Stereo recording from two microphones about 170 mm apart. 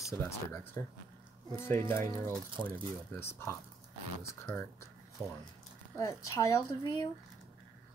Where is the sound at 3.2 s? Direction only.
15° left (ahead or behind).